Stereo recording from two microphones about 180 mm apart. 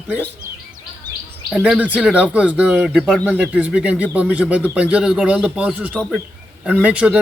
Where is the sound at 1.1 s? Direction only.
25° right (ahead or behind).